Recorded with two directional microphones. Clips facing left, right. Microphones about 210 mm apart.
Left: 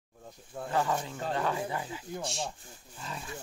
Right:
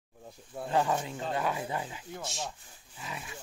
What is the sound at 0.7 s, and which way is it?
Speech, 15° right (ahead or behind).